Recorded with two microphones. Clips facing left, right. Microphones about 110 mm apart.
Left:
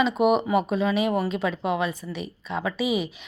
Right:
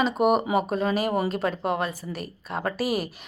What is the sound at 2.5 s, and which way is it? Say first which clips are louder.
Speech: even; 40° right (ahead or behind).